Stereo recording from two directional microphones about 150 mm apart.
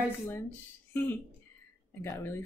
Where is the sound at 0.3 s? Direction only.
15° left (ahead or behind).